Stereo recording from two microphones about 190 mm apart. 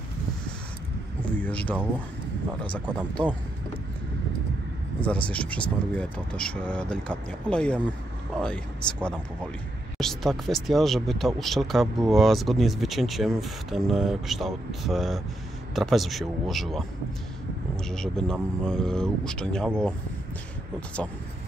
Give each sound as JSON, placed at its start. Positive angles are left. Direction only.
{"t": 1.4, "sound": "speech", "side_deg": 10}
{"t": 5.0, "sound": "speech", "side_deg": 5}
{"t": 17.8, "sound": "speech", "side_deg": 5}